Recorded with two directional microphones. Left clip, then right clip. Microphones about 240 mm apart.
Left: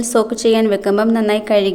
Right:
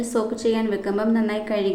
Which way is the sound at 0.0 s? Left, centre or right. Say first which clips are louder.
Left 8 dB; left.